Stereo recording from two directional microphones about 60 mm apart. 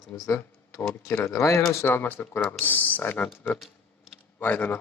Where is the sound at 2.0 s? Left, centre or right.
Left.